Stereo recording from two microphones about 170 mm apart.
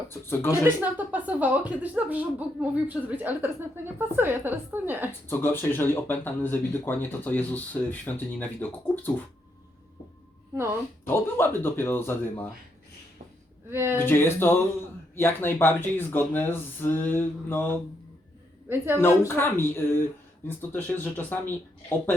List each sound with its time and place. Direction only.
0.1 s speech: 15° left (ahead or behind)
0.6 s speech: 10° right (ahead or behind)
5.3 s speech: 15° left (ahead or behind)
11.0 s speech: 15° left (ahead or behind)
13.7 s speech: 15° right (ahead or behind)
14.0 s speech: 15° left (ahead or behind)
19.0 s speech: 15° left (ahead or behind)